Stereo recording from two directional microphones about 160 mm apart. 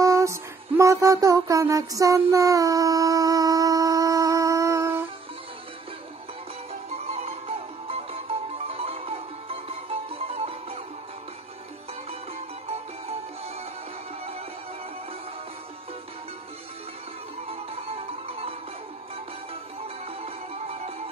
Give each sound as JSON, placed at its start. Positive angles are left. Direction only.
{"t": 0.0, "sound": "music", "side_deg": -20}
{"t": 6.7, "sound": "music", "side_deg": -40}
{"t": 17.5, "sound": "music", "side_deg": -40}
{"t": 20.1, "sound": "music", "side_deg": -40}